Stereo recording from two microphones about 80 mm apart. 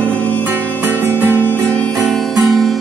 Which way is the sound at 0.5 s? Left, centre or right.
Right.